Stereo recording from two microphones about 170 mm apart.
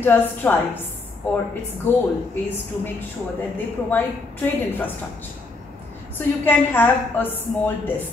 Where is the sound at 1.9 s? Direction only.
10° left (ahead or behind).